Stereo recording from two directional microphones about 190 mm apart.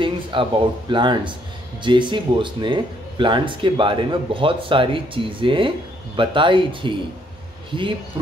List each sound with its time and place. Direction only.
0.0 s speech: 25° right (ahead or behind)